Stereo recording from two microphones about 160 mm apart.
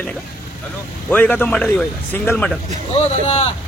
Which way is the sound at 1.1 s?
10° left (ahead or behind).